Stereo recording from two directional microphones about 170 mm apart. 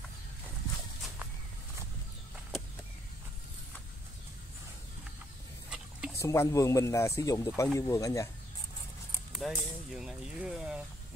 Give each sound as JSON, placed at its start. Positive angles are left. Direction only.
{"t": 5.7, "sound": "a sound", "side_deg": -5}
{"t": 6.1, "sound": "speech", "side_deg": 15}
{"t": 9.3, "sound": "speech", "side_deg": 0}